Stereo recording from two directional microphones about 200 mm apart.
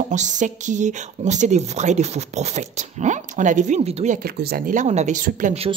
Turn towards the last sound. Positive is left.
turn(degrees=-35)  # may be behind; listen again after turning